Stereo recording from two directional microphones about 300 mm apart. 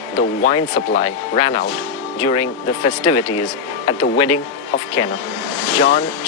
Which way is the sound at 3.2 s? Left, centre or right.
Left.